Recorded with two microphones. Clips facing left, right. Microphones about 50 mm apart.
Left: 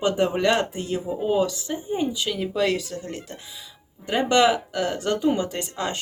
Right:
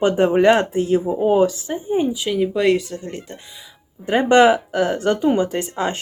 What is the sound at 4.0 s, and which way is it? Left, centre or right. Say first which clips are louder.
Speech: right 6 dB; right.